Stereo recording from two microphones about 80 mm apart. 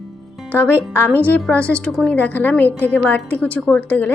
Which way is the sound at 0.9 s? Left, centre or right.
Left.